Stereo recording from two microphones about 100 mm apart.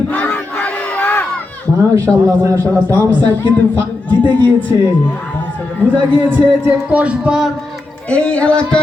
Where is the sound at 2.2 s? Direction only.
35° right (ahead or behind).